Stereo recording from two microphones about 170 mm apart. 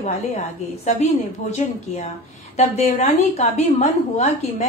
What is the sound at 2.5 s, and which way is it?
A woman's voice, 40° left (ahead or behind).